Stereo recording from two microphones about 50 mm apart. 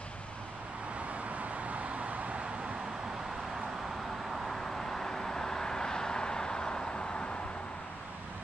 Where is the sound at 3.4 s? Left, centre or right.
Centre; by 7.4 s left.